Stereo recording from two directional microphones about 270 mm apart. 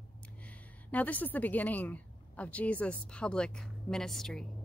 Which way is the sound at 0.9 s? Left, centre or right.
Centre.